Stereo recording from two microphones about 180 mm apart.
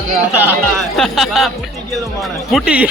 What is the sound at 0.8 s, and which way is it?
Speech, centre (ahead or behind).